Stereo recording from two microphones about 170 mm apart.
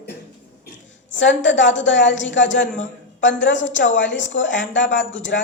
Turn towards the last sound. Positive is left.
turn(degrees=90)